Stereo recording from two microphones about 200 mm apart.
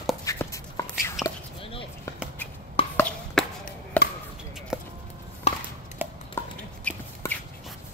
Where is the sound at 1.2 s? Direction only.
25° left (ahead or behind).